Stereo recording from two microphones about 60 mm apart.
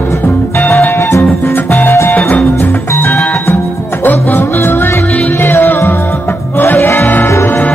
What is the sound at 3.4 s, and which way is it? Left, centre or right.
Music, left.